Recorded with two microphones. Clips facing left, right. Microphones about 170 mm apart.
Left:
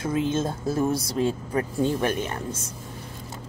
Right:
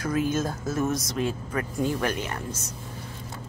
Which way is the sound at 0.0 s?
25° left (ahead or behind).